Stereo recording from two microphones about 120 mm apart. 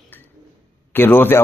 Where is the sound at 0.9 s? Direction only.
15° left (ahead or behind).